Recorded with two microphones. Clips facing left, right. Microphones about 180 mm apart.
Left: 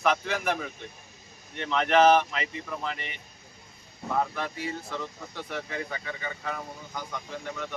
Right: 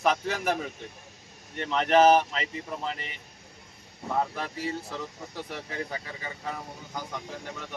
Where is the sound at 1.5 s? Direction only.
40° right (ahead or behind).